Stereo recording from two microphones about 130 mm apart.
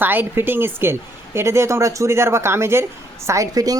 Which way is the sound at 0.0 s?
15° right (ahead or behind).